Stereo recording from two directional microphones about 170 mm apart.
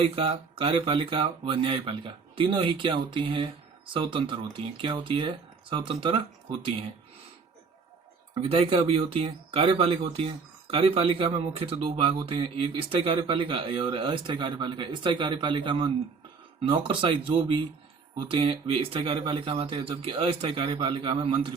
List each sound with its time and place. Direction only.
0.2 s speech: 35° right (ahead or behind)
8.4 s speech: 35° right (ahead or behind)